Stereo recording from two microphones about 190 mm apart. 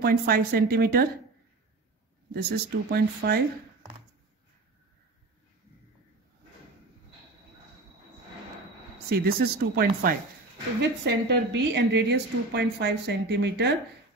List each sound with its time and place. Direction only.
0.0 s speech: 55° right (ahead or behind)
2.3 s a woman's voice: 60° right (ahead or behind)
9.2 s speech: 55° right (ahead or behind)
10.8 s a woman's voice: 65° right (ahead or behind)